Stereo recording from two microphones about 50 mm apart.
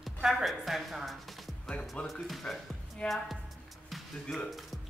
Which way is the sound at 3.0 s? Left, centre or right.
Centre.